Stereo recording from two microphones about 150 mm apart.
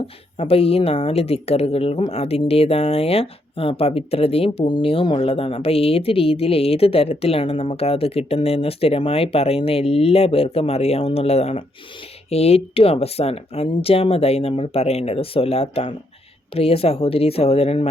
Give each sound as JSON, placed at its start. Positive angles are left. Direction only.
{"t": 0.0, "sound": "a woman's voice", "side_deg": 40}